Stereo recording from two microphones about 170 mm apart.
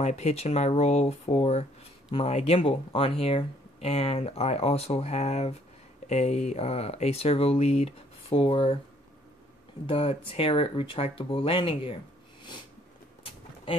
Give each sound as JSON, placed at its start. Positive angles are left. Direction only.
{"t": 0.0, "sound": "speech", "side_deg": 40}
{"t": 9.8, "sound": "speech", "side_deg": 35}